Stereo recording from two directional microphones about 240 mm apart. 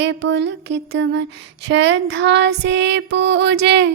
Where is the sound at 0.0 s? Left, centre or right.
Right.